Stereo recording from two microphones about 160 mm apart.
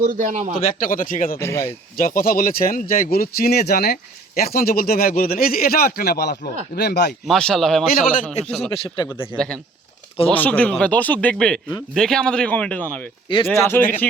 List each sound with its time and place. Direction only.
0.0 s a man's voice: 55° right (ahead or behind)
0.8 s speech: 60° left (ahead or behind)
1.4 s speech: 15° left (ahead or behind)
2.0 s a man's voice: 60° left (ahead or behind); by 7.1 s 90° left
7.3 s speech: 5° left (ahead or behind)
7.9 s speech: 65° left (ahead or behind)
8.4 s speech: centre (ahead or behind)
13.2 s speech: 30° left (ahead or behind)
13.5 s speech: 15° left (ahead or behind)